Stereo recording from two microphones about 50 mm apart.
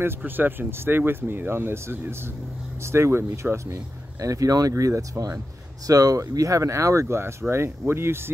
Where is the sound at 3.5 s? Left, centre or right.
Right.